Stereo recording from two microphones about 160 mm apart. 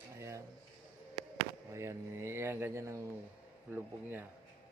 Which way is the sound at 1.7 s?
15° right (ahead or behind).